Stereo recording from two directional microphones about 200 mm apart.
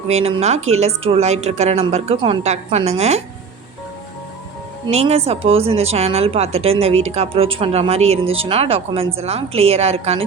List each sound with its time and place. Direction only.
0.1 s a woman's voice: 30° right (ahead or behind)
4.9 s a woman's voice: 30° right (ahead or behind)